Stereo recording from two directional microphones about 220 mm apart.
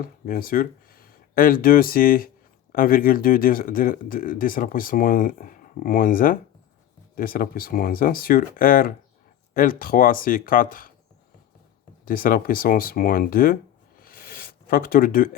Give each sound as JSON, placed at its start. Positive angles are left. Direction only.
{"t": 0.0, "sound": "speech", "side_deg": 40}
{"t": 12.0, "sound": "speech", "side_deg": 40}
{"t": 14.0, "sound": "a sound", "side_deg": 40}